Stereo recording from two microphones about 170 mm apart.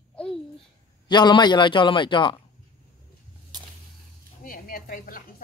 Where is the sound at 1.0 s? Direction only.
25° left (ahead or behind).